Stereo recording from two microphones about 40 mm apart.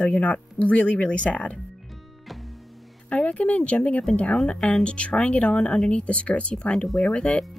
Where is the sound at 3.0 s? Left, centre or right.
Left.